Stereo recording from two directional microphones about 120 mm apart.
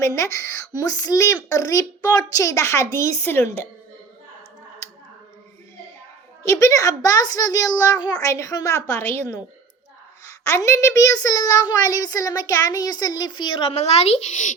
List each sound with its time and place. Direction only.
0.0 s speech: 25° left (ahead or behind)
6.4 s speech: 25° left (ahead or behind)
10.4 s a child's voice: 25° left (ahead or behind); by 13.7 s 45° left (ahead or behind)
13.7 s speech: 65° left (ahead or behind); by 14.5 s 85° left